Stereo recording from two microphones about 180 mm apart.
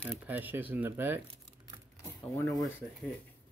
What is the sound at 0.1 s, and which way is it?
Speech, 10° right (ahead or behind).